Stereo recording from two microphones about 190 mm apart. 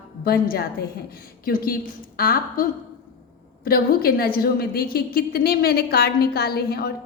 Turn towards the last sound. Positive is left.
turn(degrees=55)  # may be behind; listen again after turning